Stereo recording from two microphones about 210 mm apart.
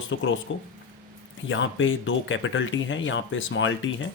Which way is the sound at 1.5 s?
65° left (ahead or behind).